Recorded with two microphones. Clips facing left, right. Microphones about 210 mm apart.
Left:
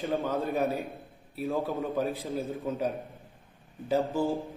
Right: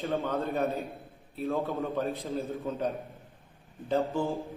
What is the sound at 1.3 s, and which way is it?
A man's voice, centre (ahead or behind).